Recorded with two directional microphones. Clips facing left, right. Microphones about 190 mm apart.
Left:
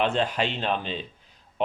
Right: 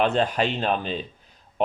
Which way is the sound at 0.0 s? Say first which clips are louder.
Right 3 dB; 45° right (ahead or behind).